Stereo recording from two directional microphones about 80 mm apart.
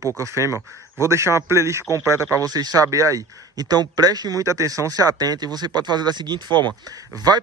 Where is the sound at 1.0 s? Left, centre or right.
Right.